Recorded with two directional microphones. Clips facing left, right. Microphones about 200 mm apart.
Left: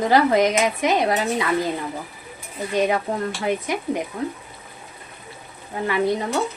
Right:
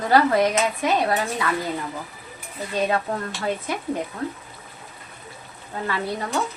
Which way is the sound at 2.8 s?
15° left (ahead or behind).